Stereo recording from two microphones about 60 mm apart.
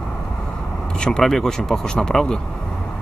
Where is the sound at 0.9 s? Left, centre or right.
Centre.